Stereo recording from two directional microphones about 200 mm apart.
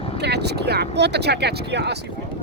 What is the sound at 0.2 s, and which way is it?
Speech, 55° right (ahead or behind).